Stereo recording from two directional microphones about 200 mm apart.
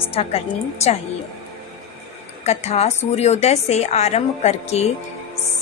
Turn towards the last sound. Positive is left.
turn(degrees=35)  # may be behind; listen again after turning